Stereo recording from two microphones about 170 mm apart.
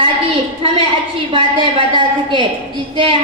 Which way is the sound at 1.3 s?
30° right (ahead or behind).